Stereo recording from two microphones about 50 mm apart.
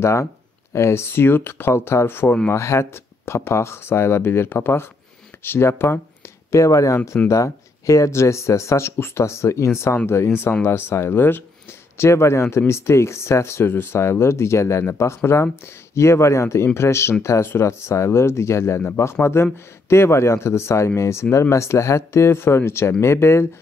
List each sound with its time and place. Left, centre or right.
0.0 s speech: left
2.5 s speech: left
6.5 s speech: left
8.9 s speech: left
10.0 s speech: left
12.0 s speech: left
16.6 s speech: left